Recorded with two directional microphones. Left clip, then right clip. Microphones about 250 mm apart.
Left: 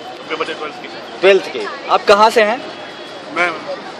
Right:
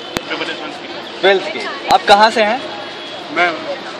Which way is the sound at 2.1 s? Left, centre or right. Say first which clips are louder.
Left 1 dB; left.